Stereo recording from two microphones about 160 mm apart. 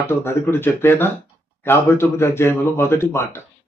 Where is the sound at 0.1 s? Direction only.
15° left (ahead or behind).